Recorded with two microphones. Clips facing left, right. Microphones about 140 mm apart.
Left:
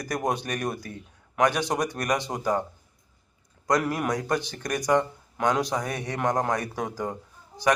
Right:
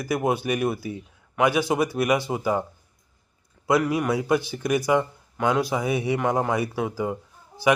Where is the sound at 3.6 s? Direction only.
5° right (ahead or behind).